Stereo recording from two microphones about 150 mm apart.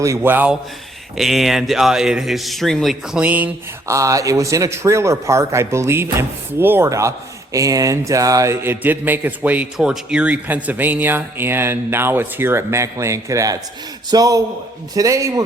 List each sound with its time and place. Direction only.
0.0 s speech: 15° right (ahead or behind)
1.1 s speech: centre (ahead or behind)
3.9 s a man's voice: 20° right (ahead or behind)